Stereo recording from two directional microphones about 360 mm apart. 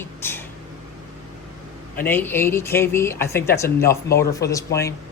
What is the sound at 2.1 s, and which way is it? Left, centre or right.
Speech, centre.